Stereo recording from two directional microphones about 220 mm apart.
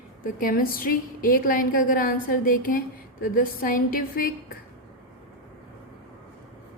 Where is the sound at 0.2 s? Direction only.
40° left (ahead or behind).